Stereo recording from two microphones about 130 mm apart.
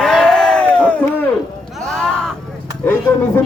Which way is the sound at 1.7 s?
5° left (ahead or behind).